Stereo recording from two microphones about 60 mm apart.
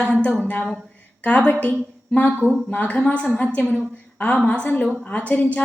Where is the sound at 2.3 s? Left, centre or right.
Right.